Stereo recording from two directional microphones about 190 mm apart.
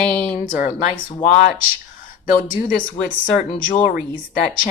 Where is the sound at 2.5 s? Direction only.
45° left (ahead or behind).